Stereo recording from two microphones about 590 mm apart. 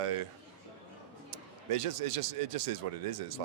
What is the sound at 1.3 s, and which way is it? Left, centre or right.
Speech, right.